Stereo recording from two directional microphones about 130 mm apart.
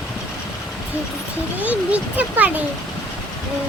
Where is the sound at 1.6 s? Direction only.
10° right (ahead or behind).